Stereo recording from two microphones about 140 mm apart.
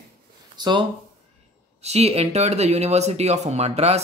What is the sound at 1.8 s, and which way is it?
Speech, 50° right (ahead or behind).